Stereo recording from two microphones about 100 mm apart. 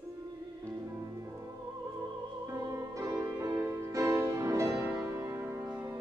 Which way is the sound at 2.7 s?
35° right (ahead or behind).